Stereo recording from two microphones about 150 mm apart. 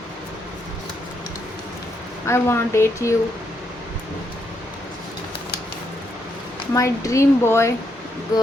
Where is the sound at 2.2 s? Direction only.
15° left (ahead or behind).